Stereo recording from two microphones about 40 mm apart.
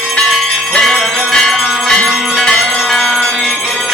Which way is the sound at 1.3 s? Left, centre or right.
Centre.